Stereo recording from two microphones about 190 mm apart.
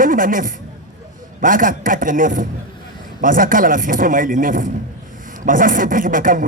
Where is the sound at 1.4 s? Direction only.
45° right (ahead or behind).